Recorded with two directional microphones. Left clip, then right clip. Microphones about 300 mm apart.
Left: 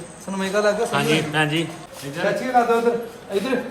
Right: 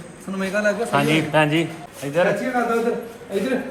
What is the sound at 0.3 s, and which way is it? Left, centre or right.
Speech, left.